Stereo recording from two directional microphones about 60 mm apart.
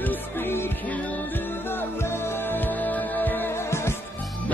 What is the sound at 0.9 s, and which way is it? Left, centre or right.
Music, left.